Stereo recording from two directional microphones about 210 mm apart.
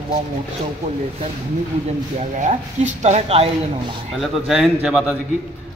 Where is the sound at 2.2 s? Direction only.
35° right (ahead or behind).